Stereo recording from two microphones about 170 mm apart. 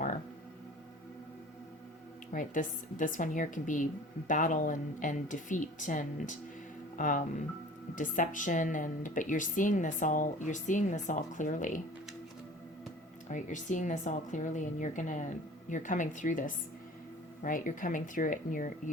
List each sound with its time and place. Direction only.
2.3 s speech: 50° left (ahead or behind)
13.3 s speech: 45° left (ahead or behind)